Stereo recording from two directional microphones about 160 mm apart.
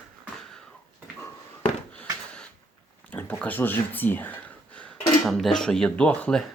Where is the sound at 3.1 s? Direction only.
10° left (ahead or behind).